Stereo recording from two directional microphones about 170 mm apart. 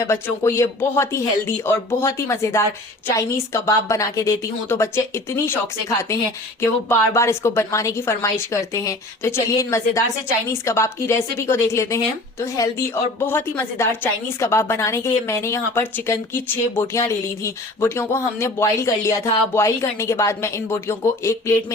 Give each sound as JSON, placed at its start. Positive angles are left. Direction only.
{"t": 0.1, "sound": "speech", "side_deg": 15}
{"t": 6.6, "sound": "speech", "side_deg": 15}